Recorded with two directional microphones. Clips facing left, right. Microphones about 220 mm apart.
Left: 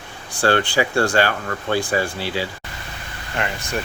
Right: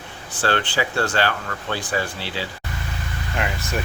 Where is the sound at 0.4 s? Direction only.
45° left (ahead or behind).